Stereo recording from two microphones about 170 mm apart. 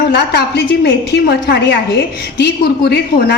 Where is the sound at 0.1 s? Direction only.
75° left (ahead or behind).